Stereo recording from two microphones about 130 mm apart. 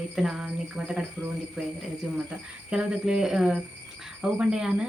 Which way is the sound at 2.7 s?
5° right (ahead or behind).